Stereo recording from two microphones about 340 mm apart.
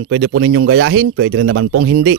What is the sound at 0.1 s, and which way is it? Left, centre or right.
Speech, right.